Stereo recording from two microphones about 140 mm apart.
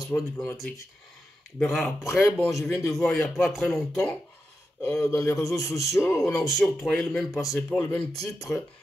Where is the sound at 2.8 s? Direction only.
Centre (ahead or behind).